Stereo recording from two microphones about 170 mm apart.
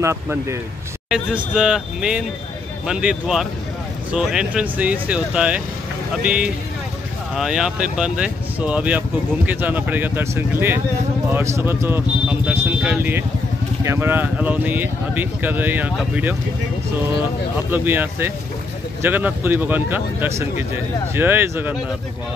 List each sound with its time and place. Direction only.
0.0 s speech: 15° right (ahead or behind)
1.1 s speech: 5° right (ahead or behind)
17.6 s speech: 10° right (ahead or behind)